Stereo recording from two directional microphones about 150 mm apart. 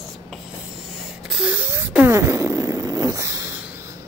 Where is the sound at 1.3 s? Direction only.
10° right (ahead or behind).